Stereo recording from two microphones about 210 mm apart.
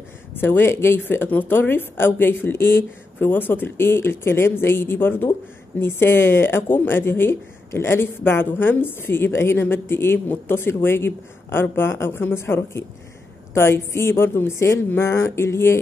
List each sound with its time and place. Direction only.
0.3 s speech: 10° left (ahead or behind)